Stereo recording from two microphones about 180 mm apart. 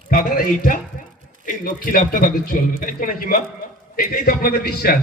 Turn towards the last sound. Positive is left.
turn(degrees=60)  # may be behind; listen again after turning